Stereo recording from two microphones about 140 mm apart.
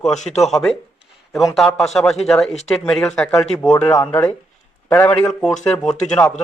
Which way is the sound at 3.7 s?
25° left (ahead or behind).